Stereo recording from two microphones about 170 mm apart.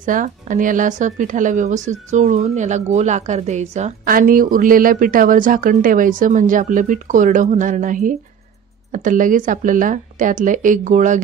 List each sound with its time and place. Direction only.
0.0 s speech: 50° right (ahead or behind)